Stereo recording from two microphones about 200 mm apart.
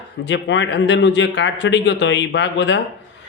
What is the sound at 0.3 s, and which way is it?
Speech, 65° left (ahead or behind).